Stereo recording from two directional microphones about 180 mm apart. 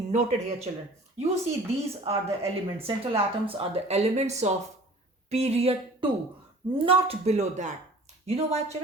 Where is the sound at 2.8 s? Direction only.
30° right (ahead or behind).